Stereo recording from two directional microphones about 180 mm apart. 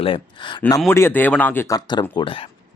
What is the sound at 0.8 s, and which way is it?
Speech, 10° left (ahead or behind).